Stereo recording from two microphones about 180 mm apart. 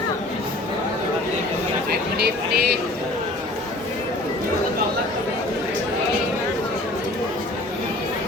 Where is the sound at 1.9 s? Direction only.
60° right (ahead or behind).